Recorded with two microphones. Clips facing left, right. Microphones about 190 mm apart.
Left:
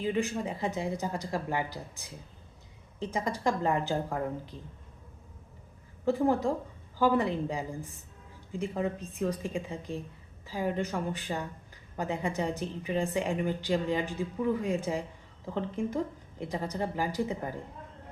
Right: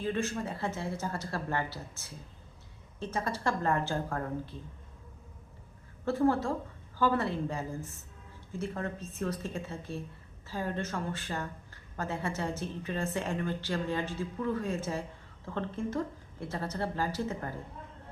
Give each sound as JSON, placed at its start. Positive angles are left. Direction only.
{"t": 0.0, "sound": "speech", "side_deg": 15}
{"t": 6.1, "sound": "speech", "side_deg": 15}